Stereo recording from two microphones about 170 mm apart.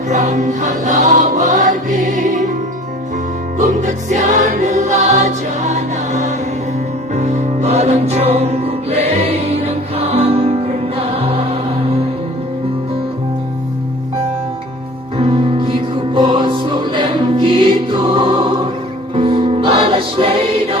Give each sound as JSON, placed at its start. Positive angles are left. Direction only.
{"t": 0.1, "sound": "music", "side_deg": -45}
{"t": 3.8, "sound": "choir", "side_deg": -45}
{"t": 7.1, "sound": "music", "side_deg": -45}
{"t": 15.2, "sound": "music", "side_deg": -30}